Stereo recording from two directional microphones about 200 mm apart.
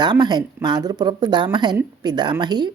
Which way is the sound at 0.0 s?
20° right (ahead or behind).